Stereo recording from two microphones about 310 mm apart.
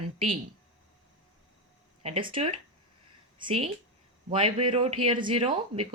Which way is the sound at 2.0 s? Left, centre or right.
Centre.